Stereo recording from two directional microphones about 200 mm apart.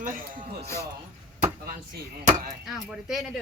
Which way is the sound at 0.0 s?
40° right (ahead or behind).